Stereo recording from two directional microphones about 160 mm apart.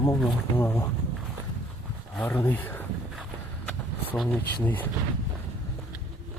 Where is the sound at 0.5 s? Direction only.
15° left (ahead or behind).